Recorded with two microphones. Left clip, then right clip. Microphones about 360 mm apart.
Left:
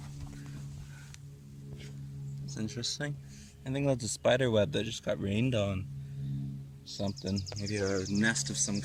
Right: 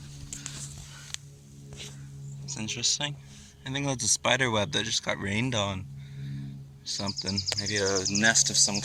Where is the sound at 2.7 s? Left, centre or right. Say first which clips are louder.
Right 9 dB; centre.